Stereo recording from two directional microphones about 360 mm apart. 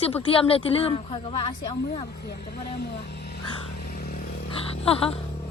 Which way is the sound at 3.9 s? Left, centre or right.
Left.